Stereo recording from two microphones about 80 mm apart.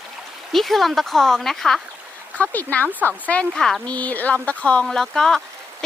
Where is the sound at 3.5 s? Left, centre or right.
Centre.